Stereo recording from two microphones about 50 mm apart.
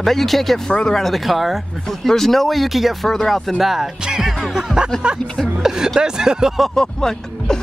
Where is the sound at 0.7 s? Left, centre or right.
Centre.